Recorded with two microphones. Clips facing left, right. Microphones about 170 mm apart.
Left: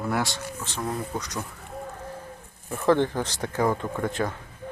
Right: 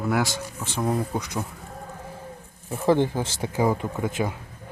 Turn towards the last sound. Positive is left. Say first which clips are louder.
# right 1 dB
turn(degrees=-5)  # may be behind; listen again after turning